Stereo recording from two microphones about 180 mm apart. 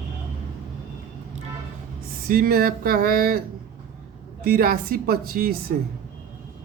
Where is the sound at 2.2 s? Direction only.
55° right (ahead or behind).